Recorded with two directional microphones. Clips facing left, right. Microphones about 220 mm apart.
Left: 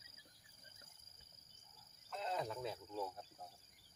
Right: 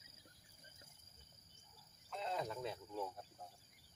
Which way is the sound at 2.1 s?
Centre (ahead or behind).